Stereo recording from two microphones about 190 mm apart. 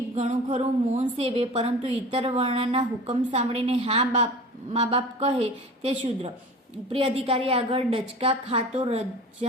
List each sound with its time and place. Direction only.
0.2 s a woman's voice: 35° right (ahead or behind)